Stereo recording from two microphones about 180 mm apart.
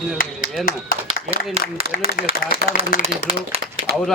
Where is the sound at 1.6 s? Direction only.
35° right (ahead or behind).